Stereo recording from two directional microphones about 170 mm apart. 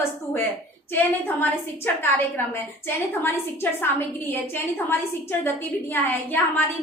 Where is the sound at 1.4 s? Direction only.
10° left (ahead or behind).